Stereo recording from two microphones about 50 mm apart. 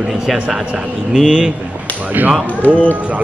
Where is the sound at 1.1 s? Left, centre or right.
Centre.